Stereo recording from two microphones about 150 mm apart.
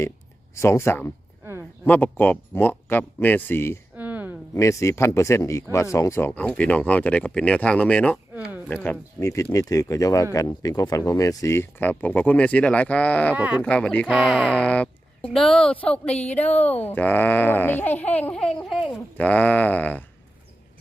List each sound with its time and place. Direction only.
0.5 s speech: 20° left (ahead or behind)
3.9 s a sound: 10° right (ahead or behind)
4.5 s speech: 20° left (ahead or behind)
13.3 s speech: 10° right (ahead or behind)
13.6 s speech: 5° left (ahead or behind)